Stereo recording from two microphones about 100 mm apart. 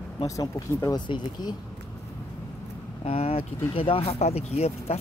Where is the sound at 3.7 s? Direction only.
65° left (ahead or behind); by 5.0 s 90° left.